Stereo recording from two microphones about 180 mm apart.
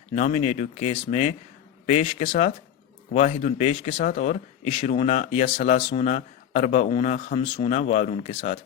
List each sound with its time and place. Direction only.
0.1 s speech: 40° left (ahead or behind)